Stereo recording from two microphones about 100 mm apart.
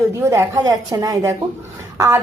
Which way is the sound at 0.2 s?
25° right (ahead or behind).